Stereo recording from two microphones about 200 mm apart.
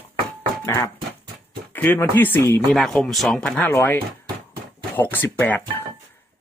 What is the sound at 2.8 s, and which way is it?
Speech, centre (ahead or behind).